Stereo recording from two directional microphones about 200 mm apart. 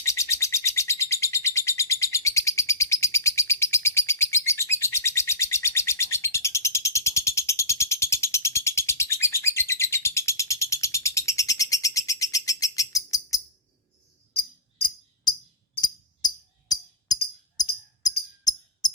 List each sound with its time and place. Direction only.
0.0 s bird: 15° left (ahead or behind)
14.3 s jingle bell: 25° left (ahead or behind)
15.8 s tambourine: 20° left (ahead or behind)